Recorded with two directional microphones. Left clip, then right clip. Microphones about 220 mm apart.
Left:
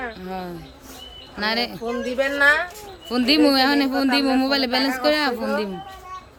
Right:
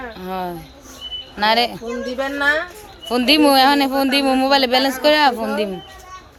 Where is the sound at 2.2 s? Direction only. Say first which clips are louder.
Left 1 dB; 15° left (ahead or behind).